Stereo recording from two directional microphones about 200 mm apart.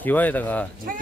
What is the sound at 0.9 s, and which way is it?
Speech, 45° right (ahead or behind).